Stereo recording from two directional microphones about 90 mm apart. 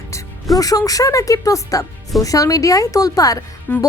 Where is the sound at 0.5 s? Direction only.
40° left (ahead or behind).